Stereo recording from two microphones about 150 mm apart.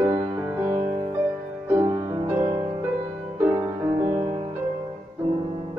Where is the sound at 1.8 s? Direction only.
50° right (ahead or behind).